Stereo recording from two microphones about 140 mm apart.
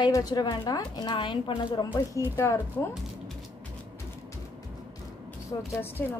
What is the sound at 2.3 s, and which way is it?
Speech, 20° left (ahead or behind).